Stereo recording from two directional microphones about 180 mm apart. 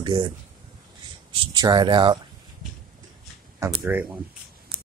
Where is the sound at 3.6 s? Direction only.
10° right (ahead or behind).